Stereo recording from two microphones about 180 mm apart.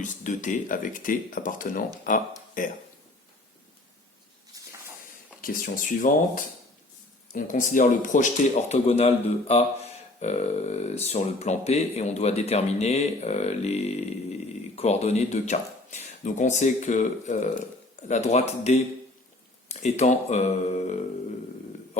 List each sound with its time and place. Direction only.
0.0 s speech: 45° left (ahead or behind)
4.5 s a sound: 20° right (ahead or behind)
5.4 s speech: 50° left (ahead or behind)